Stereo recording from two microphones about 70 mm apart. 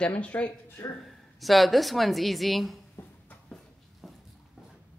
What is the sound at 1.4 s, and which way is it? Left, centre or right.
Speech, centre.